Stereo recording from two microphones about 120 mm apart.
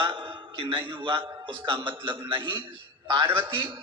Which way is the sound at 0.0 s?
45° right (ahead or behind).